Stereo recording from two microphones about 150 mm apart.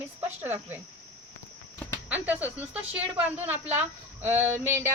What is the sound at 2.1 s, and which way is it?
A woman's voice, 10° right (ahead or behind).